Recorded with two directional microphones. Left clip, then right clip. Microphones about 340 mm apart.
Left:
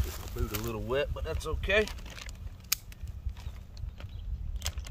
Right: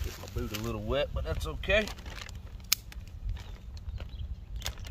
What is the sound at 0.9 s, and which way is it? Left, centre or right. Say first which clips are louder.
Speech: even; centre.